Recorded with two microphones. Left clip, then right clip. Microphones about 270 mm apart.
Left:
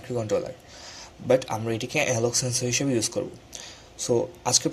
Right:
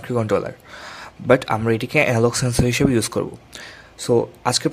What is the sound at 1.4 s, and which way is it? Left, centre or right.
Speech, right.